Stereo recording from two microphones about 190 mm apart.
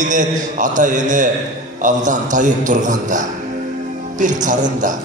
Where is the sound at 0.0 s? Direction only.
40° right (ahead or behind).